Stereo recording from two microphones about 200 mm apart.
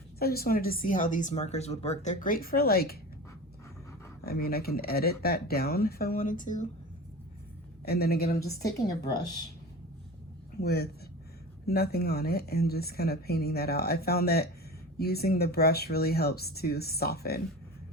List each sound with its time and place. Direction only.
0.2 s speech: 50° left (ahead or behind)
4.2 s speech: 50° left (ahead or behind)
7.9 s speech: 50° left (ahead or behind)
10.6 s speech: 50° left (ahead or behind)